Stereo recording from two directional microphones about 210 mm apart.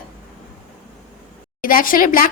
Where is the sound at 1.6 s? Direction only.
40° left (ahead or behind).